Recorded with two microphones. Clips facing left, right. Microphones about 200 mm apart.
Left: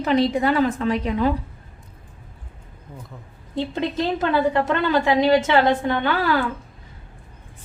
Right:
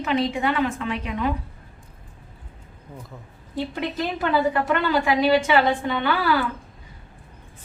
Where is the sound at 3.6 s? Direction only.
20° left (ahead or behind).